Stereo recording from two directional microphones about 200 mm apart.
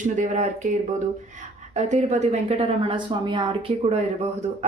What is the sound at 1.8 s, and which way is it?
A woman's voice, 35° right (ahead or behind).